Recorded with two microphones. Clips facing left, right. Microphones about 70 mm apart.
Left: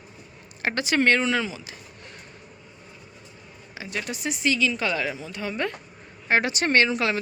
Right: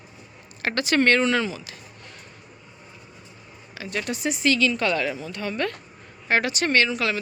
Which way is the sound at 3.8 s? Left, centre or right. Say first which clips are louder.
Right 3 dB; centre.